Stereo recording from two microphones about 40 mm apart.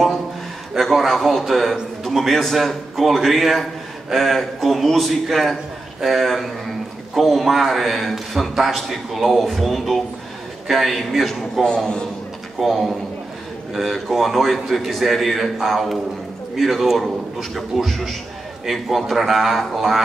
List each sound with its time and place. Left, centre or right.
0.7 s a man's voice: centre
18.7 s a man's voice: centre